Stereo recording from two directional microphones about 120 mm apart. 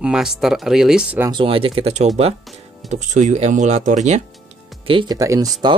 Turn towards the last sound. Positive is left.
turn(degrees=-25)  # may be behind; listen again after turning